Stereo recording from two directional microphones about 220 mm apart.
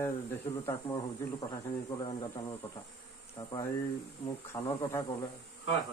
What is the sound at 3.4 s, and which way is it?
Speech, 20° left (ahead or behind).